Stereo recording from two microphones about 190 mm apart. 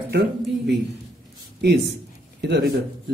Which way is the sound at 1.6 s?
60° right (ahead or behind).